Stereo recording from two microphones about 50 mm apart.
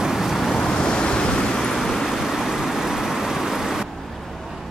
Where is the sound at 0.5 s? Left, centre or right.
Centre.